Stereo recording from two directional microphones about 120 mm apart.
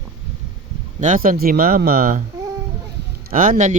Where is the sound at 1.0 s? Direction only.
90° right.